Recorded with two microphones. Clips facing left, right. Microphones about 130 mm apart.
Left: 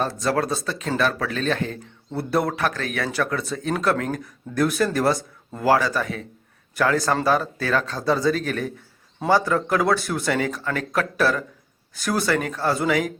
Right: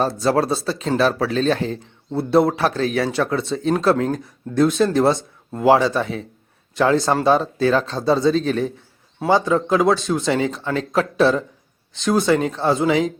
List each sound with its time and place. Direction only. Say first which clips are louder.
0.0 s speech: right 4 dB; 30° right (ahead or behind)